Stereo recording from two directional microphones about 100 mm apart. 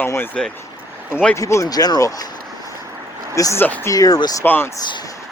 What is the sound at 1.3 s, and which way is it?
Speech, 30° left (ahead or behind).